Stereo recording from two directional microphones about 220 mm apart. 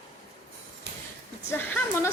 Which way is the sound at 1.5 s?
10° left (ahead or behind).